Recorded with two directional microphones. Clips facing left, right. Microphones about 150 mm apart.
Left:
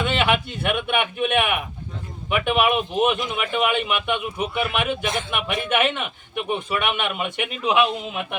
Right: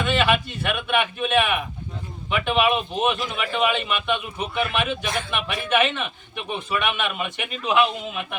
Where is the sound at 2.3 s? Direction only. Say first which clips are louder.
Left 1 dB; 15° left (ahead or behind).